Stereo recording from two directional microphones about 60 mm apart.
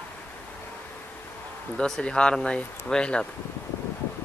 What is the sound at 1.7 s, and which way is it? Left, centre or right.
Speech, centre.